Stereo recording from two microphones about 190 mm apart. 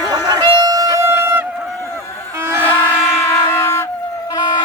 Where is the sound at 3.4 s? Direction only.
15° left (ahead or behind).